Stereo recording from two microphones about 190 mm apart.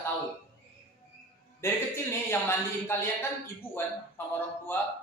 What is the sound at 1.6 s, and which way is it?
A man's voice, 15° left (ahead or behind).